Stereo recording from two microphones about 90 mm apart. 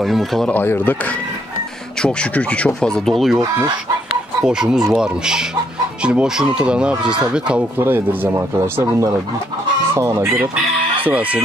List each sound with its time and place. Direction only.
0.0 s speech: centre (ahead or behind)
0.5 s speech: 20° left (ahead or behind)
2.0 s speech: 15° left (ahead or behind)
4.5 s speech: 10° right (ahead or behind)
7.8 s speech: 20° right (ahead or behind)